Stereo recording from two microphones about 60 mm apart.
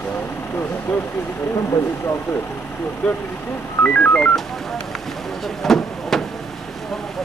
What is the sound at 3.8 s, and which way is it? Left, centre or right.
Telephone dialing, left.